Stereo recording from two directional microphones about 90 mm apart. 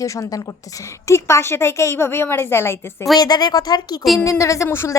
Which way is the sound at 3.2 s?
50° left (ahead or behind).